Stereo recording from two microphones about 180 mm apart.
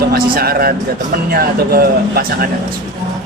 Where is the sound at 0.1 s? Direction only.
55° right (ahead or behind).